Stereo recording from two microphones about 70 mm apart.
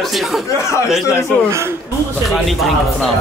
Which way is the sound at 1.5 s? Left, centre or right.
Right.